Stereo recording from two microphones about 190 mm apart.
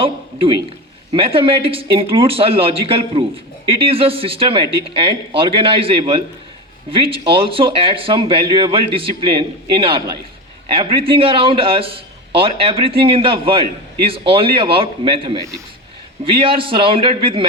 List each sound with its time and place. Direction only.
0.0 s a sound: 30° right (ahead or behind)
1.1 s speech: 30° right (ahead or behind)
10.7 s speech: 30° right (ahead or behind)